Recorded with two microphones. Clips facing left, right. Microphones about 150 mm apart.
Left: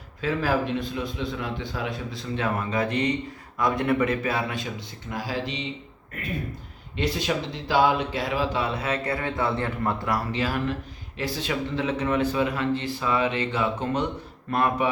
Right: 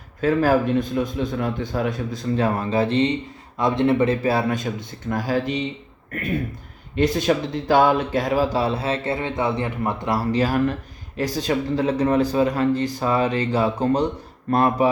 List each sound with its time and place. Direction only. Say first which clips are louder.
0.2 s a man's voice: right 7 dB; 45° right (ahead or behind)
6.9 s speech: right 7 dB; 45° right (ahead or behind); by 10.2 s 20° right (ahead or behind)
10.3 s speech: right 6 dB; 40° right (ahead or behind)